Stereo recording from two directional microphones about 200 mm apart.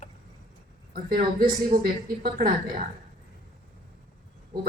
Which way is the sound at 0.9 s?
45° right (ahead or behind).